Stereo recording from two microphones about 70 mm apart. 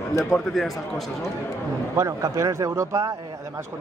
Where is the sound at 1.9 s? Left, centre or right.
Right.